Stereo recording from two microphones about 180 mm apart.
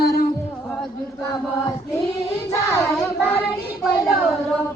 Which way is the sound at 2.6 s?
15° left (ahead or behind).